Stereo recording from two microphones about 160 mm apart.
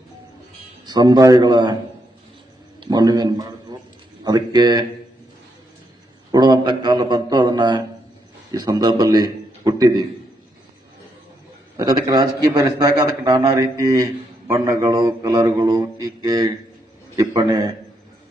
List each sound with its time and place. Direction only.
0.9 s a man's voice: 25° right (ahead or behind)
2.8 s a man's voice: 25° right (ahead or behind)
6.3 s a man's voice: 25° right (ahead or behind)
11.8 s a man's voice: 25° right (ahead or behind)